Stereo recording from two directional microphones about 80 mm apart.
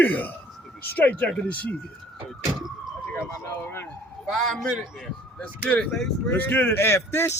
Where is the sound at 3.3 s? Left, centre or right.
Left.